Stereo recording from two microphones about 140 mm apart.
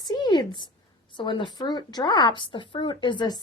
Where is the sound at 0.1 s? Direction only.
35° left (ahead or behind).